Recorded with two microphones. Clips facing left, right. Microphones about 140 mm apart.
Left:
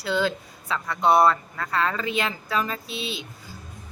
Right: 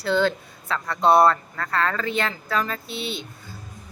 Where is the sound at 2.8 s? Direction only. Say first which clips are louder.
Right 2 dB; 30° right (ahead or behind).